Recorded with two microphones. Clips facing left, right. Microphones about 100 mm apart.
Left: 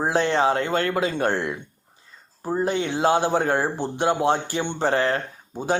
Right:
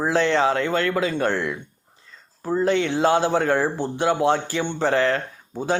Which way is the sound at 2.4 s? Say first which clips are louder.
Right 3 dB; 20° left (ahead or behind).